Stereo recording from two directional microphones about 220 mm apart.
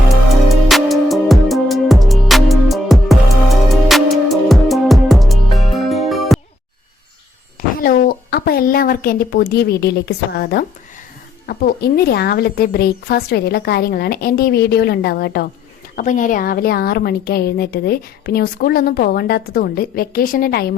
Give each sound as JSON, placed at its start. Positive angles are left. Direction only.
{"t": 0.4, "sound": "music", "side_deg": 0}
{"t": 7.9, "sound": "a woman's voice", "side_deg": 40}
{"t": 16.0, "sound": "a woman's voice", "side_deg": 35}